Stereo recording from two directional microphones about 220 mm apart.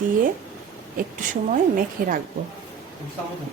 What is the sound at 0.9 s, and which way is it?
A woman's voice, 40° right (ahead or behind).